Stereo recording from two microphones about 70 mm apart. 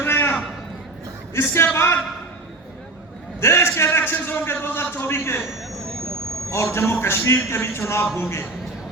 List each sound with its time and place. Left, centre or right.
0.0 s a sound: left
1.3 s a man's voice: left
3.4 s a man's voice: left
6.5 s a man's voice: left